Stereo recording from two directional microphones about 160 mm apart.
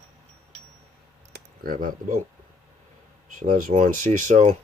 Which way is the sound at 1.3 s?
65° right (ahead or behind).